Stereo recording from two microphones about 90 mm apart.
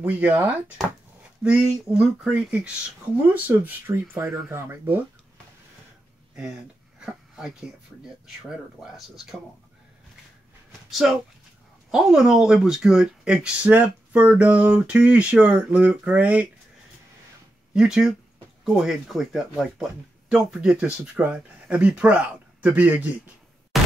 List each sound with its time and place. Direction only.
0.0 s speech: 20° right (ahead or behind)
7.0 s a sound: 5° right (ahead or behind)
8.4 s speech: centre (ahead or behind)
10.9 s speech: centre (ahead or behind); by 16.4 s 15° right (ahead or behind)
17.7 s speech: 5° right (ahead or behind)